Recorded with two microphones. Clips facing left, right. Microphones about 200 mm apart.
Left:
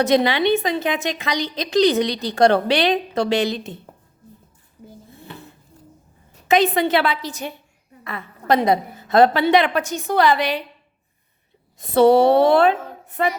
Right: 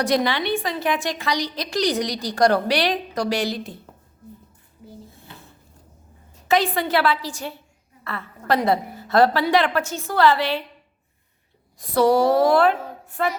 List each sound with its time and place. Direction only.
0.0 s a woman's voice: 20° left (ahead or behind)
5.3 s music: 65° left (ahead or behind)
6.5 s a woman's voice: 20° left (ahead or behind)
11.8 s a woman's voice: 25° left (ahead or behind)